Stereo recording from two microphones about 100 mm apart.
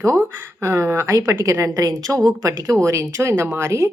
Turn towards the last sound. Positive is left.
turn(degrees=-30)  # may be behind; listen again after turning